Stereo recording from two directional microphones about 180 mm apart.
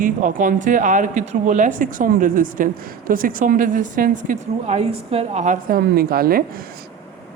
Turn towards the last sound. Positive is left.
turn(degrees=-55)  # may be behind; listen again after turning